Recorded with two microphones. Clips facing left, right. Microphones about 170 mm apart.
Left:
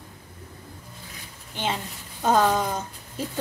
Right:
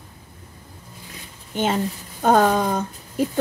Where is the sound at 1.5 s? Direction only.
50° right (ahead or behind).